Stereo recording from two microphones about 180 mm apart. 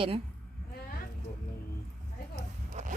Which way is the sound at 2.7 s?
45° right (ahead or behind).